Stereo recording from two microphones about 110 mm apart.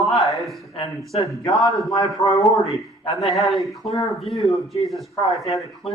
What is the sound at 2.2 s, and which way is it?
Speech, 30° left (ahead or behind).